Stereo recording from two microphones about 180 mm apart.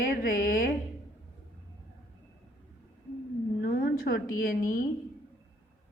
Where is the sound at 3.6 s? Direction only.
55° left (ahead or behind).